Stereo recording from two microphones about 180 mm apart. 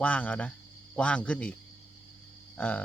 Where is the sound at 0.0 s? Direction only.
10° left (ahead or behind).